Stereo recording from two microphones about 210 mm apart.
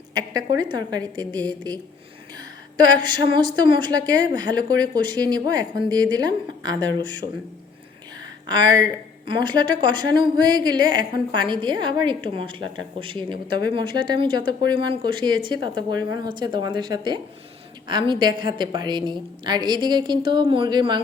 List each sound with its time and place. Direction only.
0.1 s a woman's voice: 20° right (ahead or behind)
8.4 s a woman's voice: 20° right (ahead or behind)